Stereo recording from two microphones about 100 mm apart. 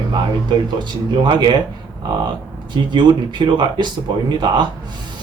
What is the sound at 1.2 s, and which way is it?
Speech, 50° right (ahead or behind).